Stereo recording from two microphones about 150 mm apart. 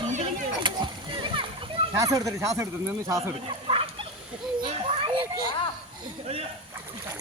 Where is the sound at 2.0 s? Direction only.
20° right (ahead or behind).